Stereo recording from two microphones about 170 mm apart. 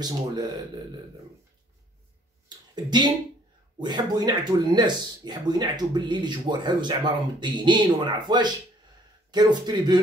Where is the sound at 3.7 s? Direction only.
25° right (ahead or behind).